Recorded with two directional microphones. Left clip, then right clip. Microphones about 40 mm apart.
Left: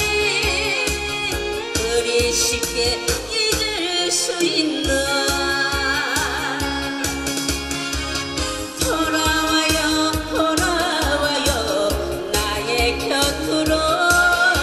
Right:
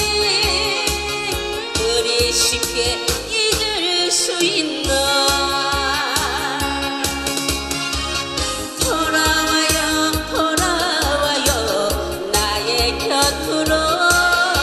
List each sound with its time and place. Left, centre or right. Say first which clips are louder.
0.2 s music: right 2 dB; right
1.9 s music: right 1 dB; right
8.9 s music: right 3 dB; right